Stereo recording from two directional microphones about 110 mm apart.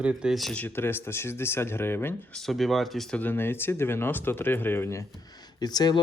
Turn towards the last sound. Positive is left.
turn(degrees=40)  # may be behind; listen again after turning